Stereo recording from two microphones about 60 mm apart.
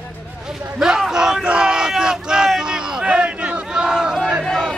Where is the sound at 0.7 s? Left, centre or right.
Centre.